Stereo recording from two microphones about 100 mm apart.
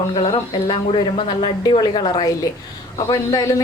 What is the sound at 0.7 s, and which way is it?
A man's voice, 50° left (ahead or behind).